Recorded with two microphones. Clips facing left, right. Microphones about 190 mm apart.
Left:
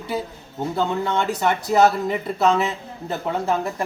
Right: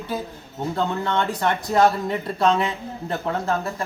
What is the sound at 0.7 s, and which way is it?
Speech, 5° left (ahead or behind).